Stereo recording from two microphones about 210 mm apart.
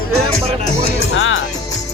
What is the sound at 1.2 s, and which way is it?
Speech, 70° left (ahead or behind).